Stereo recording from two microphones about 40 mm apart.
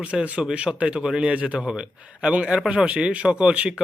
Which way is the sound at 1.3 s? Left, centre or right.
Right.